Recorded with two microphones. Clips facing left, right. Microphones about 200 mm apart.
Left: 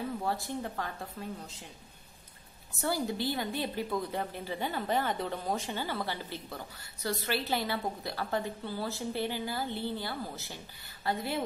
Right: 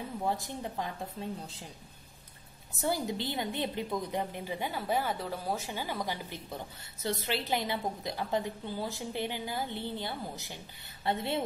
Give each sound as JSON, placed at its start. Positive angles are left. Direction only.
{"t": 0.2, "sound": "a woman's voice", "side_deg": -20}
{"t": 2.8, "sound": "a woman's voice", "side_deg": -20}